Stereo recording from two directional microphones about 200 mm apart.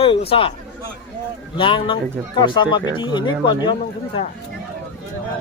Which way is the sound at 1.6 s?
25° left (ahead or behind).